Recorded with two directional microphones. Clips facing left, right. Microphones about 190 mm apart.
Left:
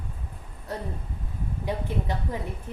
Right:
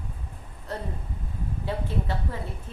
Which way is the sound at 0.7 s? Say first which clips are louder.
Even; 15° left (ahead or behind).